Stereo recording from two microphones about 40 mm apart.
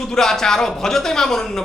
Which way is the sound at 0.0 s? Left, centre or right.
Centre.